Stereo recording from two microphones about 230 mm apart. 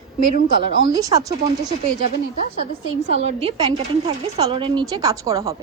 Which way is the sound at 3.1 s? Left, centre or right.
Right.